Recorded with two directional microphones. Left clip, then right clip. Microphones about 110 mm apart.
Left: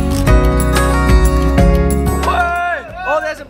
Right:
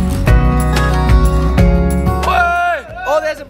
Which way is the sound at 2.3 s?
30° right (ahead or behind).